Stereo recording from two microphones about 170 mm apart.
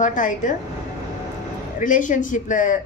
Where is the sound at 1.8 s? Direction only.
50° left (ahead or behind).